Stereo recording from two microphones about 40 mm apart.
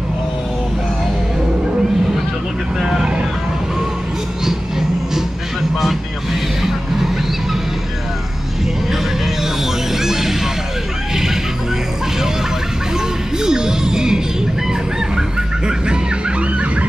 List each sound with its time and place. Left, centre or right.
2.8 s vehicle: centre
4.5 s vehicle: centre
9.9 s music: centre
13.4 s music: centre
14.7 s chicken: centre